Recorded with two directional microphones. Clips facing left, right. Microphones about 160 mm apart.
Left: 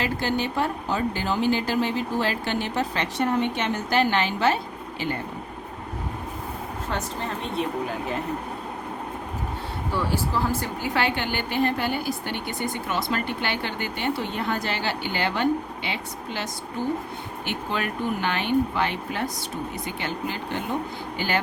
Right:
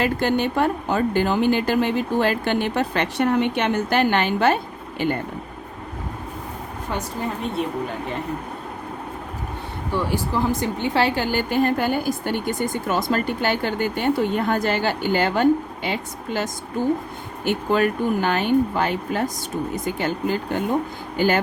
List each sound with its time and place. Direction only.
0.0 s speech: 55° right (ahead or behind)
6.9 s a woman's voice: 10° right (ahead or behind)
10.0 s a woman's voice: 15° right (ahead or behind); by 21.4 s 45° right (ahead or behind)